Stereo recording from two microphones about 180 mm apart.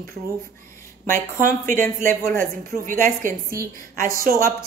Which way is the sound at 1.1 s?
50° right (ahead or behind).